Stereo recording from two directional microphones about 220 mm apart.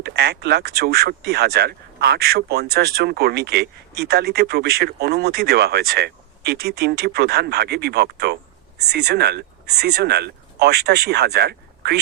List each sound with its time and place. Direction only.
0.0 s speech: 45° right (ahead or behind)